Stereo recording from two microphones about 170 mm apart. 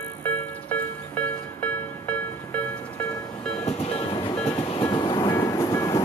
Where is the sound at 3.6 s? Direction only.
35° left (ahead or behind).